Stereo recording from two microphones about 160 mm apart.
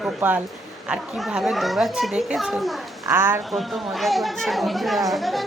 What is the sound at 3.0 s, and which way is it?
Speech, 15° right (ahead or behind).